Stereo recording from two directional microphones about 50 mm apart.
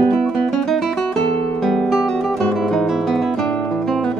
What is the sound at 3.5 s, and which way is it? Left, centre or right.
Guitar, centre.